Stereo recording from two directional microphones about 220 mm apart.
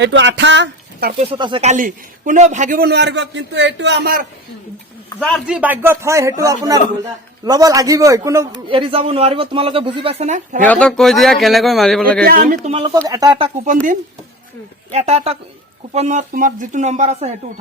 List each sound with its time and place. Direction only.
0.0 s speech: 55° right (ahead or behind)
1.2 s a man's voice: 25° right (ahead or behind); by 4.3 s 45° right (ahead or behind)
5.0 s a man's voice: 5° left (ahead or behind)
5.5 s speech: 5° right (ahead or behind)
8.7 s speech: 25° right (ahead or behind)
10.6 s a man's voice: 5° left (ahead or behind)
12.2 s a man's voice: 45° right (ahead or behind)
12.6 s speech: 20° right (ahead or behind)
14.9 s a man's voice: 30° right (ahead or behind)